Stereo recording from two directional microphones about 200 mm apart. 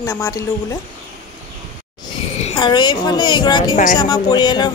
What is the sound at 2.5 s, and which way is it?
Speech, 20° left (ahead or behind).